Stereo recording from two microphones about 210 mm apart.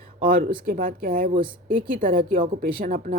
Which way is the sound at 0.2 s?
45° right (ahead or behind).